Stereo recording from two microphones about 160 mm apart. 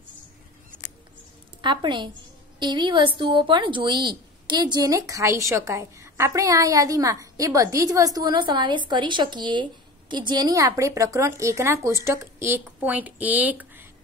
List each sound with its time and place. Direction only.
1.6 s a woman's voice: 30° right (ahead or behind); by 13.8 s 10° right (ahead or behind)